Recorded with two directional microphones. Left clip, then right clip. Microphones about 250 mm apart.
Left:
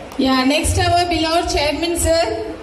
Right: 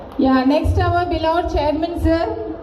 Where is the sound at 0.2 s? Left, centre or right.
Left.